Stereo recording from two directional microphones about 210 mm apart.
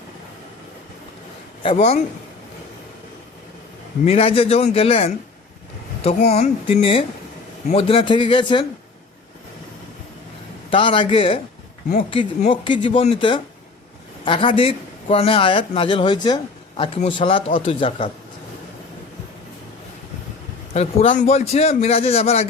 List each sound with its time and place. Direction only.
1.6 s a man's voice: 30° left (ahead or behind)
4.0 s a man's voice: 30° left (ahead or behind)
10.7 s a man's voice: 25° left (ahead or behind)
12.6 s a man's voice: 25° left (ahead or behind)
20.7 s a man's voice: 35° left (ahead or behind)